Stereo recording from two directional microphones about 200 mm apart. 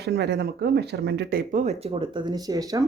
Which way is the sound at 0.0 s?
55° right (ahead or behind).